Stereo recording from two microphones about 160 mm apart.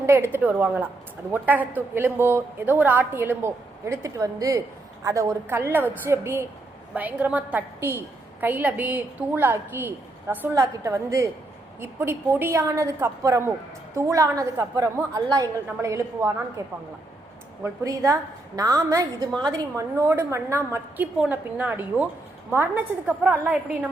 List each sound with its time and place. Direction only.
0.0 s a woman's voice: 15° right (ahead or behind)
17.6 s a woman's voice: 20° right (ahead or behind)